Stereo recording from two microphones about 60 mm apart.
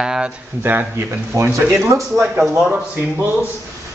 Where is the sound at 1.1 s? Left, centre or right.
Right.